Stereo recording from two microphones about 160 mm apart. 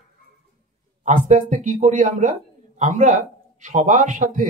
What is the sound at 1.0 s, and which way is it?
Speech, 50° right (ahead or behind).